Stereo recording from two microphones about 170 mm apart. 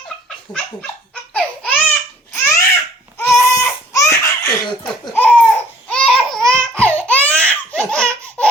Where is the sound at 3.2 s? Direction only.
15° left (ahead or behind).